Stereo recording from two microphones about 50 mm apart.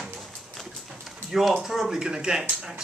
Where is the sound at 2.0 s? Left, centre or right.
Centre.